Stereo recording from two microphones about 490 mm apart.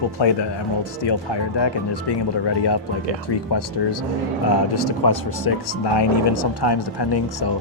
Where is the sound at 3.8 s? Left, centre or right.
Left.